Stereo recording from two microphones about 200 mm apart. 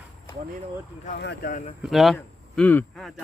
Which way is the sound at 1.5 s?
35° left (ahead or behind).